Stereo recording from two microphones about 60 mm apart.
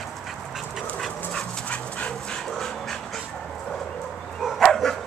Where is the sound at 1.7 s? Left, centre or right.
Left.